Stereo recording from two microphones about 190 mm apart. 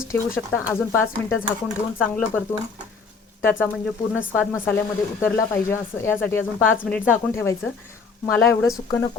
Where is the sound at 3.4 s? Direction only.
10° left (ahead or behind).